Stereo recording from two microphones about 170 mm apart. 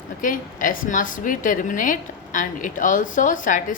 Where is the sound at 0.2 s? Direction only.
50° left (ahead or behind).